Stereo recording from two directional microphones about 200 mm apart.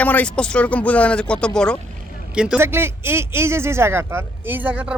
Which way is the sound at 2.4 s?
5° right (ahead or behind).